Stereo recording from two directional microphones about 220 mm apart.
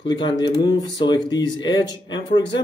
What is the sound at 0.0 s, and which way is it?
Speech, 20° left (ahead or behind).